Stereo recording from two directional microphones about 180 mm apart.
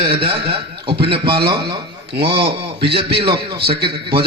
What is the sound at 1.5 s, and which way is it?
Speech, 65° right (ahead or behind).